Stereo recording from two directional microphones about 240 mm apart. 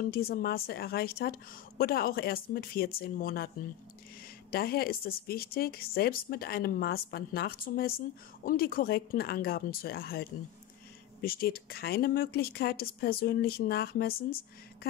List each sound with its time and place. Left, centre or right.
0.0 s speech: left
4.5 s speech: left